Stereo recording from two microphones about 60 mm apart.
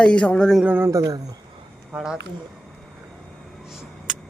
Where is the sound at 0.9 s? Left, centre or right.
Right.